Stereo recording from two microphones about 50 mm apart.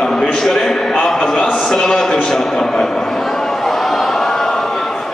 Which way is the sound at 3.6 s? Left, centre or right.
Centre.